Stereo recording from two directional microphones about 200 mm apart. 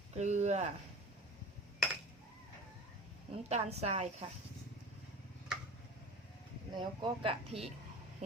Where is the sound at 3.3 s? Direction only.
30° right (ahead or behind).